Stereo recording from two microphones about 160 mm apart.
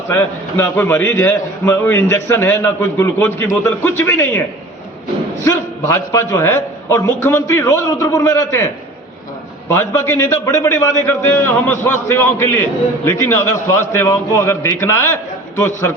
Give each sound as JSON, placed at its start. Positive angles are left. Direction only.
{"t": 0.1, "sound": "a man's voice", "side_deg": 15}
{"t": 5.5, "sound": "a man's voice", "side_deg": 20}
{"t": 9.7, "sound": "a man's voice", "side_deg": 15}